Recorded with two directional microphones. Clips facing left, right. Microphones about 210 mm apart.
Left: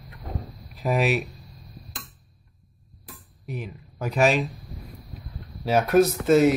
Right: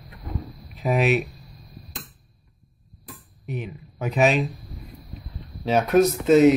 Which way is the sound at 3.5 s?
Centre (ahead or behind).